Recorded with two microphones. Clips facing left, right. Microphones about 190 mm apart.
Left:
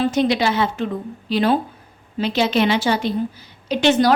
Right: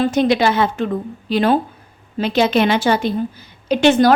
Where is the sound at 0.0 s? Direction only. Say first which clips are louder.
Right 3 dB; 50° right (ahead or behind).